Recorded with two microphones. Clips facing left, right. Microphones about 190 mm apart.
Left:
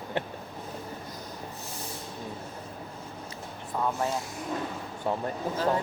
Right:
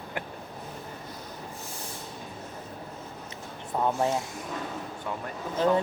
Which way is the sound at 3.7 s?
20° right (ahead or behind).